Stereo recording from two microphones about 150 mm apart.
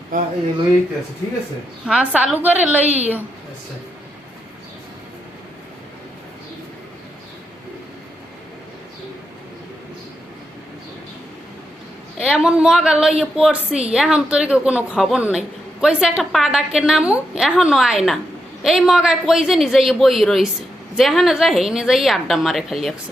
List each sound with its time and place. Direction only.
1.8 s a woman's voice: 10° right (ahead or behind)
2.8 s a woman's voice: 45° right (ahead or behind)
12.1 s a woman's voice: centre (ahead or behind)